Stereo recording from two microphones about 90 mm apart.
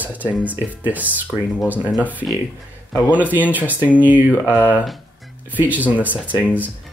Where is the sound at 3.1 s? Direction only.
15° right (ahead or behind).